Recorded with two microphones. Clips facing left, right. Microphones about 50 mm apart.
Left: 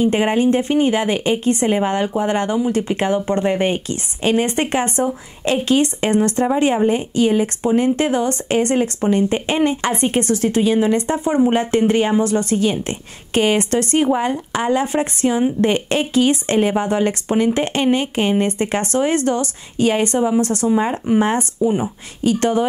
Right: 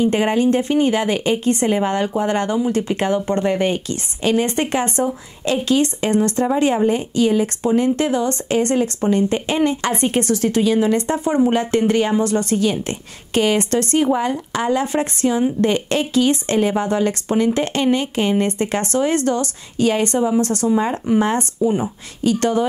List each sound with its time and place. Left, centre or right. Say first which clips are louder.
0.0 s a woman's voice: left 1 dB; centre